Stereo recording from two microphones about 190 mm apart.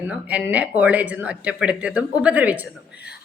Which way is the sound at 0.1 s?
5° right (ahead or behind).